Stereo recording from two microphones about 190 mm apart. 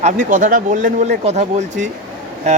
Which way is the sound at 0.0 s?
45° right (ahead or behind).